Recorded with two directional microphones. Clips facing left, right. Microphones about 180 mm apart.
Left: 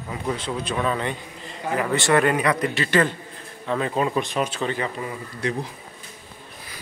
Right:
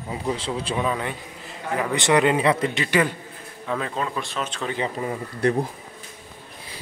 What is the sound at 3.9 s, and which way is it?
Speech, 15° left (ahead or behind).